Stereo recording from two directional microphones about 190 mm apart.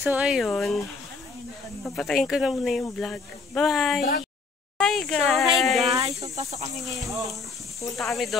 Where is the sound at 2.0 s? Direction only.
Centre (ahead or behind).